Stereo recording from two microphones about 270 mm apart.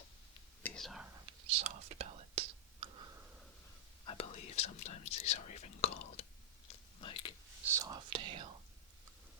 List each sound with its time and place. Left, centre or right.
0.6 s whispering: centre
1.5 s whispering: right
2.8 s a sound: centre
4.0 s whispering: left
7.0 s a sound: centre
7.6 s whispering: centre